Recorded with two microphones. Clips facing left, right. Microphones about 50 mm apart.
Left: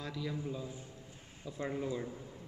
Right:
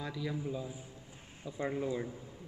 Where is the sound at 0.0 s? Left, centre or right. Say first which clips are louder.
Right 2 dB; centre.